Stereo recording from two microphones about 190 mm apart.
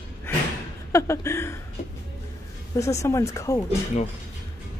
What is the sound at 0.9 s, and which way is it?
Speech, 15° left (ahead or behind).